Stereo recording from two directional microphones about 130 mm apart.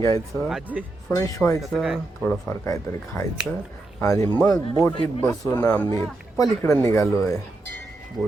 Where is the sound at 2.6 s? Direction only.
25° left (ahead or behind).